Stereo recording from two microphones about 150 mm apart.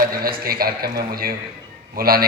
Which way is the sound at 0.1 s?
75° right (ahead or behind).